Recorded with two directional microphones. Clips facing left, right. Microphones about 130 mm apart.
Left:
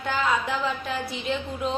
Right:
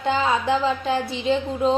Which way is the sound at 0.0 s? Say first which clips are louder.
Right 4 dB; 25° right (ahead or behind).